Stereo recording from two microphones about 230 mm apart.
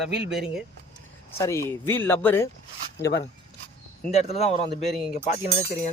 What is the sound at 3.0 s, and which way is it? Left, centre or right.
Speech, left.